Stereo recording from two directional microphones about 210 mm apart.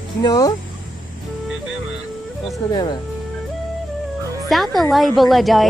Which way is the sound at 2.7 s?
20° left (ahead or behind).